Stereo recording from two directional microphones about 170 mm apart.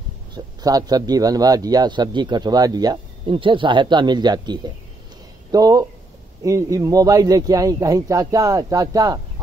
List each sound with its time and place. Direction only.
0.6 s speech: 25° right (ahead or behind)